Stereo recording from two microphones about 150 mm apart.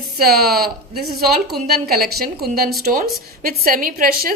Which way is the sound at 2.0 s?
90° right.